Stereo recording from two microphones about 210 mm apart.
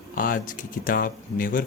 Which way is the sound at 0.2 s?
40° left (ahead or behind).